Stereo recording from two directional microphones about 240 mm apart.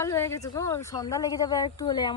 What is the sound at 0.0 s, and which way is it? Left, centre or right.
Speech, centre.